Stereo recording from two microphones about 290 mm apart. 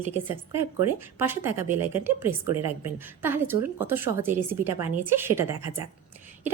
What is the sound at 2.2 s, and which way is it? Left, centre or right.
Speech, right.